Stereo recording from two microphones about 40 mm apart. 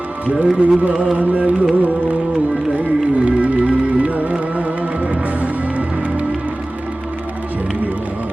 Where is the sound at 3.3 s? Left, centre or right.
Right.